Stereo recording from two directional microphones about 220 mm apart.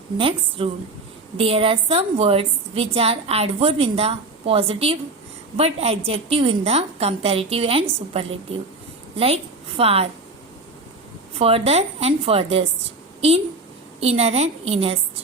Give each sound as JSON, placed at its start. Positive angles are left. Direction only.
{"t": 0.2, "sound": "a woman's voice", "side_deg": -25}
{"t": 11.3, "sound": "a woman's voice", "side_deg": -25}
{"t": 14.0, "sound": "a woman's voice", "side_deg": -30}